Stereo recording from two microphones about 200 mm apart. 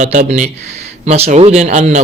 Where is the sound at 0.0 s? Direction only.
35° right (ahead or behind).